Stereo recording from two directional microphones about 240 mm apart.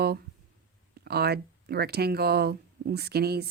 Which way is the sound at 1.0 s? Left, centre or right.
Right.